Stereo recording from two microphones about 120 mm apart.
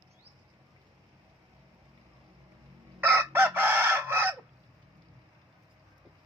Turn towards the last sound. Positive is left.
turn(degrees=-20)  # may be behind; listen again after turning